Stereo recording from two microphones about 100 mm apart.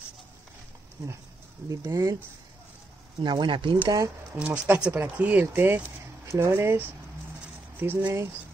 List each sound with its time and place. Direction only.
1.0 s speech: 30° right (ahead or behind)
3.2 s speech: 50° right (ahead or behind)
4.4 s speech: 15° right (ahead or behind)
6.2 s speech: 30° right (ahead or behind)